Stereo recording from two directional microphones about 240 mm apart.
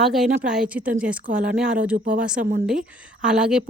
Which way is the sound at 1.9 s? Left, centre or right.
Right.